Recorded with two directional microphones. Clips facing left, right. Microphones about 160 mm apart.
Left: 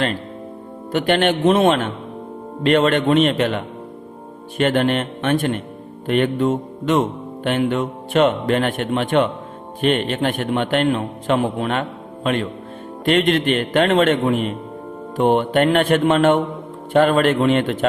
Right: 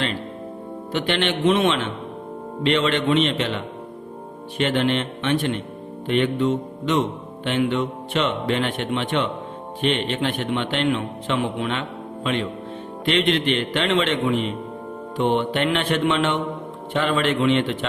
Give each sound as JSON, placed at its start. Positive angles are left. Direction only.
{"t": 0.9, "sound": "a man's voice", "side_deg": 50}